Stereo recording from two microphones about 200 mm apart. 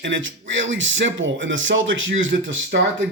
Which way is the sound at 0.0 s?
70° right (ahead or behind).